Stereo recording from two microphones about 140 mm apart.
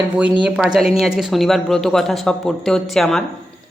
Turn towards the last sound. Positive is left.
turn(degrees=0)  # may be behind; listen again after turning